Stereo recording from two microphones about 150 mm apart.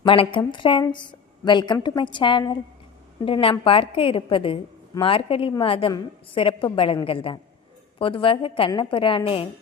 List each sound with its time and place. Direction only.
0.0 s a woman's voice: 35° left (ahead or behind)